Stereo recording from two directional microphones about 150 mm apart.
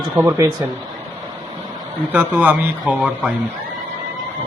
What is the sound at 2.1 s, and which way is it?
Speech, 10° right (ahead or behind).